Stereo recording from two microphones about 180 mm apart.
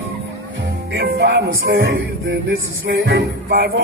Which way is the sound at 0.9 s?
70° right (ahead or behind).